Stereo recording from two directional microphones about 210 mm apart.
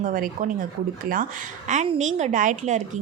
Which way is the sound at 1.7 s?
35° right (ahead or behind).